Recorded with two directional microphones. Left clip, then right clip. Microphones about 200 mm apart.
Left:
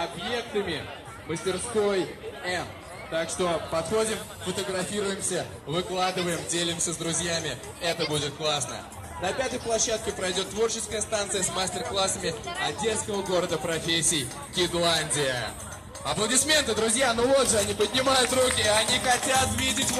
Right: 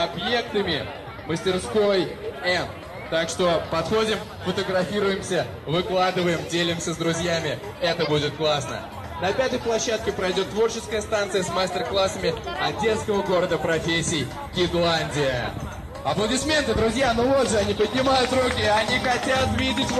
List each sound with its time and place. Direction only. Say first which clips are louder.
0.0 s a man's voice: right 6 dB; 40° right (ahead or behind); by 14.2 s 15° right (ahead or behind)
14.5 s speech: right 3 dB; centre (ahead or behind)
16.1 s a man's voice: right 2 dB; 20° left (ahead or behind); by 19.9 s 45° left (ahead or behind)